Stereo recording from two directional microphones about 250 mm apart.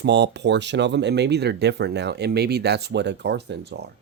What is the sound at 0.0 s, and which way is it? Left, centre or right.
Speech, right.